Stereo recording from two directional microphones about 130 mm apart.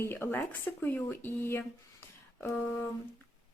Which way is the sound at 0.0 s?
15° left (ahead or behind).